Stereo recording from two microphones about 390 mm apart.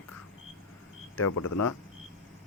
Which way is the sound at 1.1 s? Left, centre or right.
Left.